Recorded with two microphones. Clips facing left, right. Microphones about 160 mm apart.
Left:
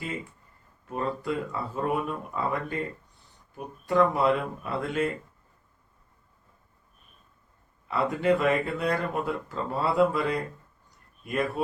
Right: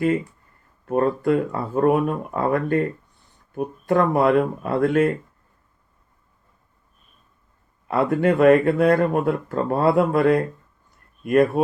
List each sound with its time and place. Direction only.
0.9 s speech: 55° right (ahead or behind)
7.9 s speech: 55° right (ahead or behind)